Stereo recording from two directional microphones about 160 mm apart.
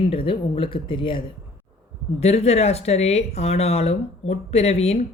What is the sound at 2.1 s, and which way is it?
A woman's voice, 40° left (ahead or behind).